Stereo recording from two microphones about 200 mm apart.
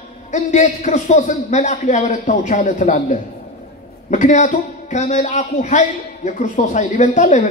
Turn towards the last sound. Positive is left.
turn(degrees=35)  # may be behind; listen again after turning